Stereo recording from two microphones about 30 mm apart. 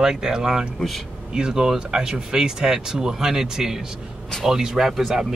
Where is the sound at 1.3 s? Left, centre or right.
Right.